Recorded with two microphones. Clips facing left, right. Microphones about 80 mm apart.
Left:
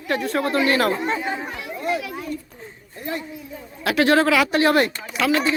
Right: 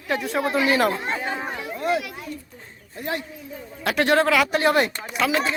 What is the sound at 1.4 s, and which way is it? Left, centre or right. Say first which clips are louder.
Chatter: right 1 dB; right.